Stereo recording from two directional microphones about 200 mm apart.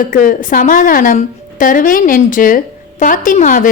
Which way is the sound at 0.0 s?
45° left (ahead or behind).